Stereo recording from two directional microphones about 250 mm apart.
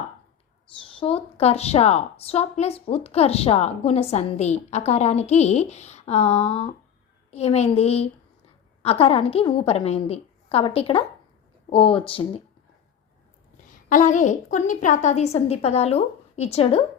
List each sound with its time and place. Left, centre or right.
0.9 s a woman's voice: left
13.9 s a woman's voice: left